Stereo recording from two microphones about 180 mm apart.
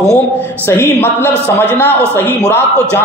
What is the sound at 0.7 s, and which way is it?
A man's voice, 10° left (ahead or behind).